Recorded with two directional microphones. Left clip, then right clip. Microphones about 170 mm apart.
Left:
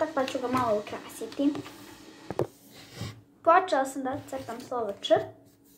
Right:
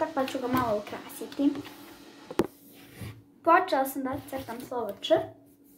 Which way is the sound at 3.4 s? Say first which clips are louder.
Left 1 dB; 10° right (ahead or behind).